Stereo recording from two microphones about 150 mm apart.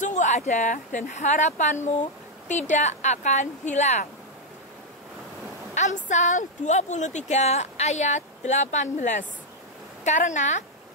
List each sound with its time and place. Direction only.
0.0 s speech: 50° left (ahead or behind)
5.8 s speech: 50° left (ahead or behind)